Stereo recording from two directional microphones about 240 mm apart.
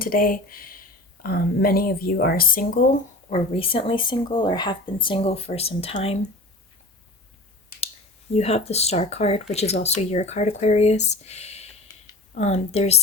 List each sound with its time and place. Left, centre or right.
0.0 s speech: left
8.3 s speech: left